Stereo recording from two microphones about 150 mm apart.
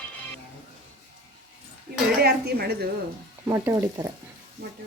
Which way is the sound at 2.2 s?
90° right.